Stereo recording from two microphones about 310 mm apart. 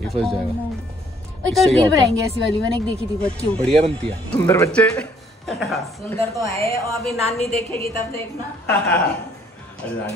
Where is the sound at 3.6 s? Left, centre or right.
Centre.